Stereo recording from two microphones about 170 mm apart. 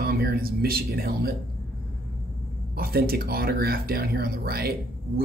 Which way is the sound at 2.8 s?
60° right (ahead or behind).